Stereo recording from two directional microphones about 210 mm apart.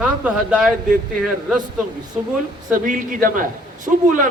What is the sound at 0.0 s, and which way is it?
A man's voice, 5° right (ahead or behind).